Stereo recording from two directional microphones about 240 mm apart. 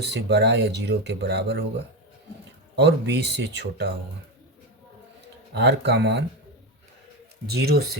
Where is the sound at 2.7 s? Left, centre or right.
Right.